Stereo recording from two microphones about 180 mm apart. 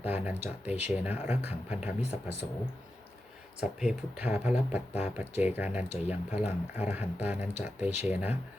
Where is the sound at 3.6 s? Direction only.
5° right (ahead or behind).